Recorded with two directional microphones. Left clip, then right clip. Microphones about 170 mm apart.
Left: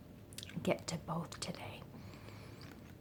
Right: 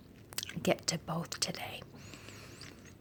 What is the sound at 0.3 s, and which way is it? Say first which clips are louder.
Speech: right 5 dB; 25° right (ahead or behind).